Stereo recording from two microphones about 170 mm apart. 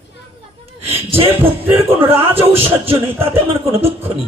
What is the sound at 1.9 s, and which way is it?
Speech, 10° right (ahead or behind).